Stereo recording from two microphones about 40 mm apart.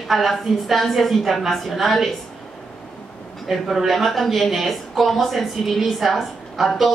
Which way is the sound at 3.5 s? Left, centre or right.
Centre.